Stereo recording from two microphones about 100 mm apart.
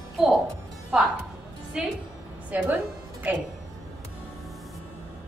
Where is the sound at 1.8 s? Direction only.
5° right (ahead or behind).